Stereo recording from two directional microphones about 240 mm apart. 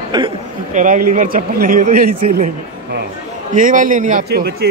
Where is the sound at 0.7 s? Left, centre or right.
Right.